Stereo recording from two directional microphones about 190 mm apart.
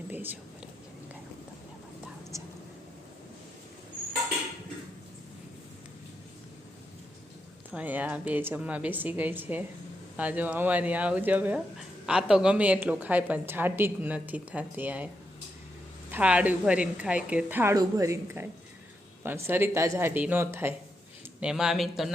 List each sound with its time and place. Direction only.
0.1 s a woman's voice: 10° right (ahead or behind)
2.3 s whispering: 15° right (ahead or behind)
7.7 s a woman's voice: 10° right (ahead or behind)
16.1 s a woman's voice: 5° right (ahead or behind)